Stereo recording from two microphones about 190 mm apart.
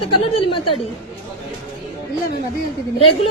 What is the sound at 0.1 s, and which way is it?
Speech, 30° left (ahead or behind).